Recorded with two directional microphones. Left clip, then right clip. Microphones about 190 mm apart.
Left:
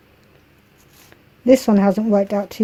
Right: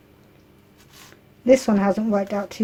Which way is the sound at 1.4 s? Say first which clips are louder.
Left 3 dB; 40° left (ahead or behind).